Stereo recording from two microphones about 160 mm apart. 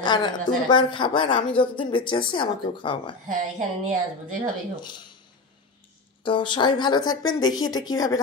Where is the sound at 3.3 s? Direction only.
50° right (ahead or behind).